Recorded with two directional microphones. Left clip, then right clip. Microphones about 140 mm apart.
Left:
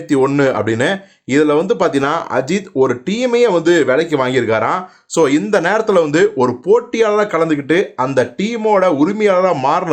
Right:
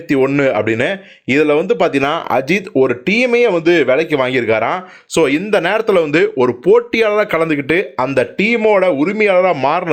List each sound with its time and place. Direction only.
0.3 s speech: 10° right (ahead or behind)